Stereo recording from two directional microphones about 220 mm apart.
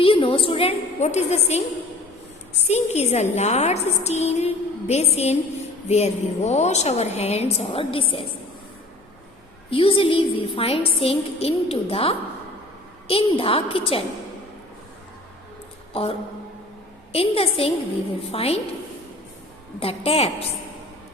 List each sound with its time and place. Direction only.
0.0 s a woman's voice: 25° left (ahead or behind)
2.6 s a woman's voice: 30° left (ahead or behind)
9.6 s a woman's voice: 25° left (ahead or behind)
15.9 s a woman's voice: 25° left (ahead or behind)
19.8 s a woman's voice: 25° left (ahead or behind)